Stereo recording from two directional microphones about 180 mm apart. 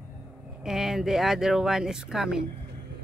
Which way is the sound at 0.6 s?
Centre (ahead or behind).